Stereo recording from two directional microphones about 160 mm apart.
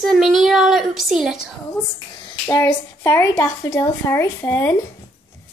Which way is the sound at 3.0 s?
20° left (ahead or behind).